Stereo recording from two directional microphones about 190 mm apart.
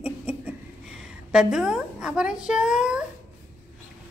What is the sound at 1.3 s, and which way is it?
A woman's voice, 5° right (ahead or behind).